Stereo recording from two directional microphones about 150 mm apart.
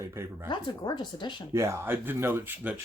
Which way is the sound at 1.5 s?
15° right (ahead or behind).